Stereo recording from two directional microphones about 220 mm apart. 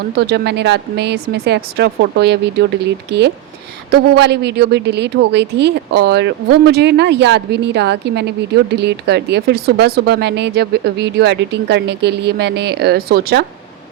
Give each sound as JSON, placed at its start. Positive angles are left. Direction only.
{"t": 0.2, "sound": "speech", "side_deg": -50}